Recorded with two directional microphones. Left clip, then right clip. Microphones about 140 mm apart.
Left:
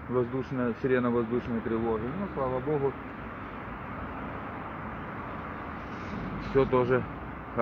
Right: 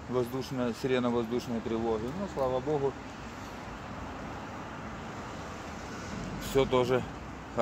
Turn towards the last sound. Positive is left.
turn(degrees=-35)  # may be behind; listen again after turning